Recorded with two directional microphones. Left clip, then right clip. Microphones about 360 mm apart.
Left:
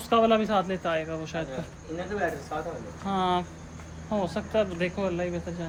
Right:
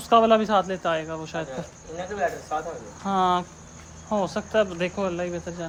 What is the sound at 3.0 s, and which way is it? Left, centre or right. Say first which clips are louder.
A man's voice: right 5 dB; centre.